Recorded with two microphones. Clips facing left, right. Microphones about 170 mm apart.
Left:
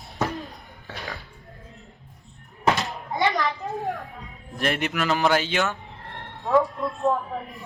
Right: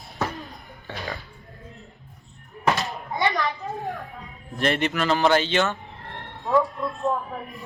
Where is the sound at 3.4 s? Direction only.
Centre (ahead or behind).